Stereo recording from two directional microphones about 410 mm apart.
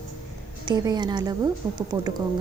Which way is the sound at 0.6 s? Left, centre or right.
Centre.